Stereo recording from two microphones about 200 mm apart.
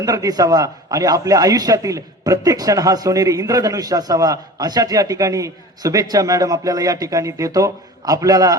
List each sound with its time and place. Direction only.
0.0 s a man's voice: 15° right (ahead or behind)